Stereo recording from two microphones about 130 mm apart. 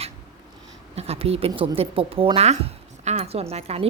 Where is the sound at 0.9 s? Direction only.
50° right (ahead or behind).